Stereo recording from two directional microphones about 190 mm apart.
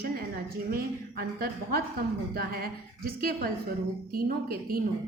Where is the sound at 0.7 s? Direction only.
50° right (ahead or behind).